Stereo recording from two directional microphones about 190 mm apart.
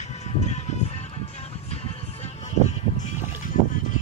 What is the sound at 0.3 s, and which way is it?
Music, 35° left (ahead or behind).